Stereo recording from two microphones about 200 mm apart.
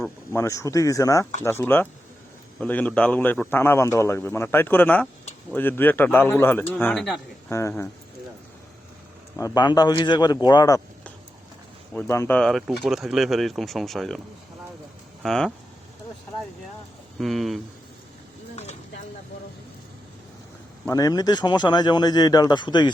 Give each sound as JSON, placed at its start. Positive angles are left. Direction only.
{"t": 0.3, "sound": "a man's voice", "side_deg": 15}
{"t": 7.5, "sound": "a man's voice", "side_deg": 15}
{"t": 9.3, "sound": "speech", "side_deg": 20}
{"t": 11.9, "sound": "a man's voice", "side_deg": 15}
{"t": 12.4, "sound": "speech", "side_deg": 0}
{"t": 15.2, "sound": "speech", "side_deg": 0}
{"t": 17.2, "sound": "speech", "side_deg": 0}
{"t": 18.5, "sound": "a sound", "side_deg": 35}
{"t": 20.8, "sound": "speech", "side_deg": 15}